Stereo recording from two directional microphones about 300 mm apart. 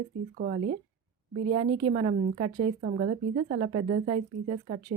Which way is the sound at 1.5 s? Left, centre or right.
Centre.